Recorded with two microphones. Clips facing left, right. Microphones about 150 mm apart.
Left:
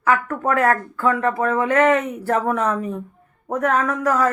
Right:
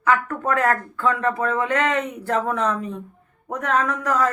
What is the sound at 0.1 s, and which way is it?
A woman's voice, 20° left (ahead or behind).